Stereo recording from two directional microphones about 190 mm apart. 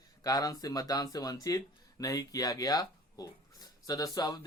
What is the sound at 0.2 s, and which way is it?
Speech, 20° left (ahead or behind).